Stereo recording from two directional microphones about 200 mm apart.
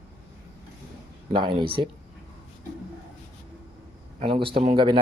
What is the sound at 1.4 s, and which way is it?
Speech, 25° right (ahead or behind).